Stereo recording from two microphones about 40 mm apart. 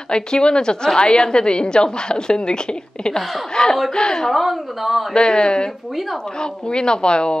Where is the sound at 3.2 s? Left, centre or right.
Centre.